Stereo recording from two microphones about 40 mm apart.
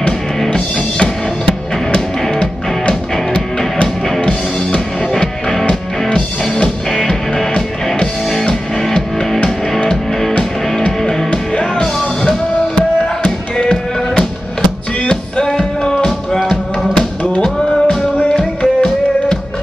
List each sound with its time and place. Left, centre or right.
0.4 s music: centre
3.7 s music: left
5.1 s music: centre
11.0 s music: centre